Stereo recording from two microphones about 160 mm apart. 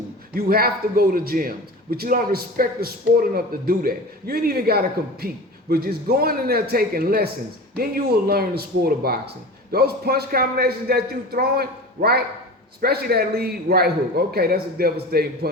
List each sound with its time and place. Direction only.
0.3 s a man's voice: 70° right (ahead or behind)